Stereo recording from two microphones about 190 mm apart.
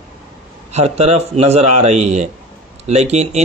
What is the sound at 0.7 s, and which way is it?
Speech, 35° right (ahead or behind).